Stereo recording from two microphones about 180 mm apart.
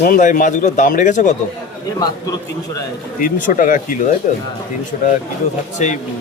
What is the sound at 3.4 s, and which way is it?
Speech, 50° left (ahead or behind).